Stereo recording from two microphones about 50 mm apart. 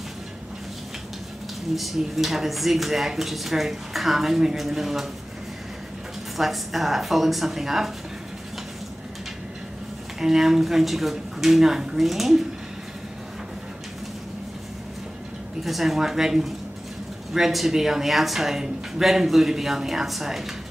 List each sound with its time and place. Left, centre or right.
1.8 s speech: centre
6.3 s speech: centre
10.2 s speech: centre
15.6 s speech: centre